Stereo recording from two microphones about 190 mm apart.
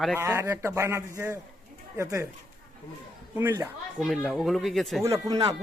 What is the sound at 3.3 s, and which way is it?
Speech, 15° right (ahead or behind).